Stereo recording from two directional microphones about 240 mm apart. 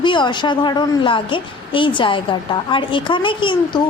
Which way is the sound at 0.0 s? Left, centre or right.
Centre.